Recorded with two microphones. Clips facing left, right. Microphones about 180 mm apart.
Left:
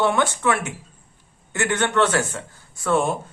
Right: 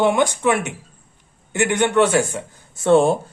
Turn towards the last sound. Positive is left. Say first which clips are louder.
# right 7 dB
turn(degrees=-30)  # may be behind; listen again after turning